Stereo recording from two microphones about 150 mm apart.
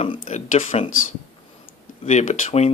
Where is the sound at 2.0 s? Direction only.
50° left (ahead or behind).